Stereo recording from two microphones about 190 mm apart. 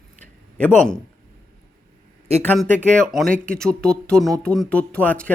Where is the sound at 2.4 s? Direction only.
5° left (ahead or behind).